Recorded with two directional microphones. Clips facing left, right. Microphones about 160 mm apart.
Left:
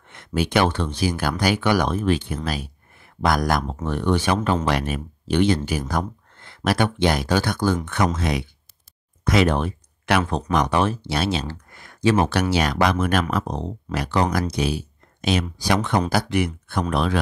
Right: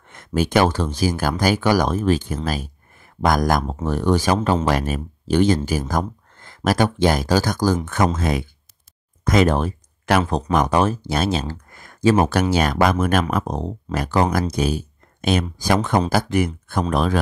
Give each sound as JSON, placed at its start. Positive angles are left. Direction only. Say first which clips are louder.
{"t": 0.1, "sound": "speech", "louder": "right 3 dB", "side_deg": -45}